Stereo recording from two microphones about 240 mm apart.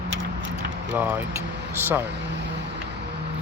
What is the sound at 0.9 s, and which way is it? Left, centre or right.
Speech, centre.